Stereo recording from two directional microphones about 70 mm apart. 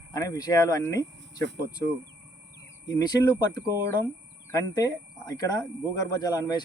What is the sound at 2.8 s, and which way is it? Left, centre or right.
Speech, left.